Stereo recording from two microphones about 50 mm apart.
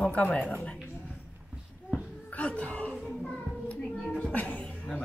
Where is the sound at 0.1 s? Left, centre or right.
Left.